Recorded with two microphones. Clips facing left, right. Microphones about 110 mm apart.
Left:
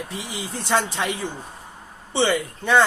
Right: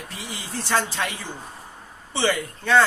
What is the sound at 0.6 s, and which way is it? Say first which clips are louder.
Speech: left 2 dB; 20° left (ahead or behind).